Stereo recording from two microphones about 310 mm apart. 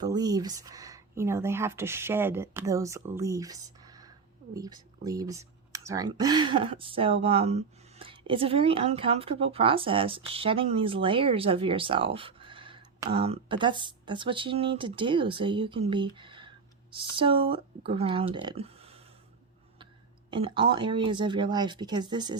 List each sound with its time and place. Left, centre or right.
0.0 s speech: centre
20.3 s speech: centre